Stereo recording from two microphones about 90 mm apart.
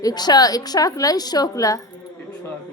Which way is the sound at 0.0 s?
50° left (ahead or behind).